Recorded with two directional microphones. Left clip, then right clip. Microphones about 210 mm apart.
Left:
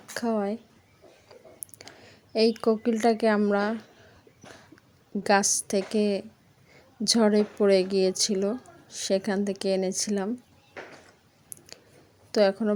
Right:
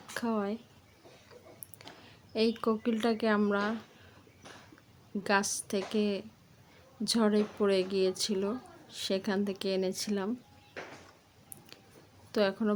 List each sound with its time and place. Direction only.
0.1 s speech: 15° left (ahead or behind)
1.8 s a woman's voice: 20° left (ahead or behind)
5.2 s a woman's voice: 20° left (ahead or behind)
12.3 s a woman's voice: 20° left (ahead or behind)